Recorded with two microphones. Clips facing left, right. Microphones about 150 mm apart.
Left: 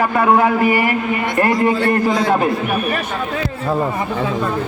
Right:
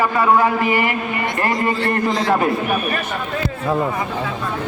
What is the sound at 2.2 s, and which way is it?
Speech, centre (ahead or behind).